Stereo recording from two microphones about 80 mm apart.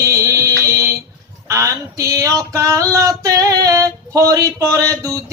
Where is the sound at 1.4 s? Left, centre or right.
Right.